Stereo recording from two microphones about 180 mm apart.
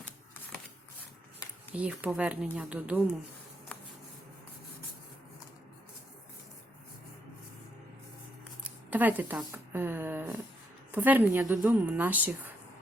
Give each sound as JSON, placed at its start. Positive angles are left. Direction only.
{"t": 1.7, "sound": "a woman's voice", "side_deg": -5}
{"t": 8.6, "sound": "a woman's voice", "side_deg": -10}